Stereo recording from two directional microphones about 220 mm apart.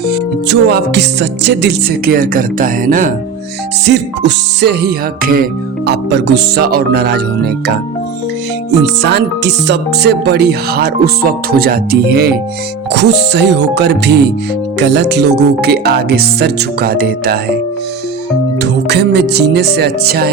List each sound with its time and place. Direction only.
0.4 s music: 50° right (ahead or behind)
3.8 s music: 50° right (ahead or behind)
8.8 s music: 50° right (ahead or behind)
18.6 s music: 50° right (ahead or behind)